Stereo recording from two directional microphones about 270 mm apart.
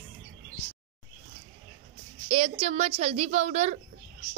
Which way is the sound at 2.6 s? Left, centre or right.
Right.